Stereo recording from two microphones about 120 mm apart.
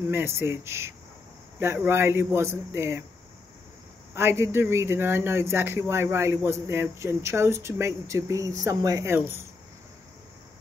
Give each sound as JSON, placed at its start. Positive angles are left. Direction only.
{"t": 0.1, "sound": "speech", "side_deg": -20}
{"t": 4.1, "sound": "speech", "side_deg": -20}